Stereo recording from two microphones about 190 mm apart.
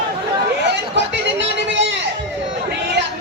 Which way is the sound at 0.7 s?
65° right (ahead or behind).